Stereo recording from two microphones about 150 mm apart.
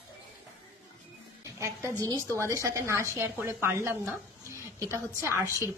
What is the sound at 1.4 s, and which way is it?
Music, 20° right (ahead or behind).